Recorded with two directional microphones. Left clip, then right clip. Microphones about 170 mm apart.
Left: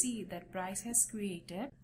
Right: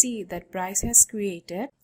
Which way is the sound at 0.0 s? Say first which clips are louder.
Right 12 dB; 40° right (ahead or behind).